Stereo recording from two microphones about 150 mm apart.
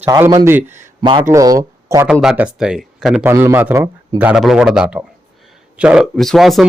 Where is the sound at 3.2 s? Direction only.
15° right (ahead or behind); by 6.7 s centre (ahead or behind).